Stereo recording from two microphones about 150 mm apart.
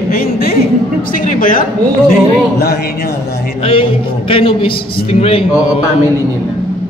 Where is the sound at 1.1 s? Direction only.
60° left (ahead or behind).